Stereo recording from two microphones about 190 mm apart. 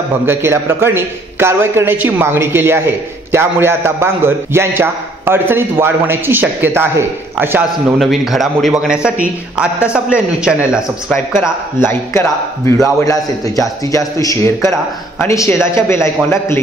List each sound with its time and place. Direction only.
0.3 s a man's voice: 10° right (ahead or behind)
8.0 s a man's voice: centre (ahead or behind)
11.4 s a man's voice: 15° left (ahead or behind)